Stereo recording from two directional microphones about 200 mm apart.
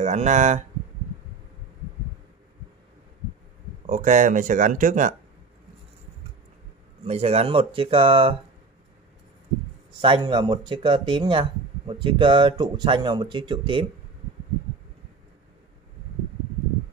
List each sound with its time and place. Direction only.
0.0 s speech: 35° right (ahead or behind)
3.8 s speech: 40° right (ahead or behind)
7.1 s speech: 30° right (ahead or behind)
10.0 s speech: 25° right (ahead or behind)